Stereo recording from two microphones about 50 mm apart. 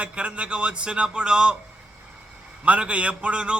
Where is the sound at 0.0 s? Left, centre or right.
Right.